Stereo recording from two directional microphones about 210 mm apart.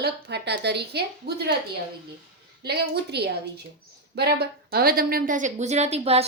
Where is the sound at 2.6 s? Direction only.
50° right (ahead or behind); by 6.2 s 30° right (ahead or behind).